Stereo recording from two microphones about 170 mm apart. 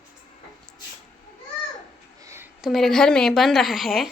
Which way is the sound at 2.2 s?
15° right (ahead or behind).